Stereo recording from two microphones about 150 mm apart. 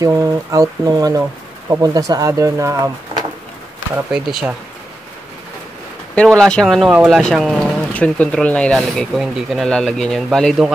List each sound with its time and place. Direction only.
0.0 s speech: 20° right (ahead or behind)
4.1 s speech: 5° right (ahead or behind)
6.1 s speech: 5° left (ahead or behind)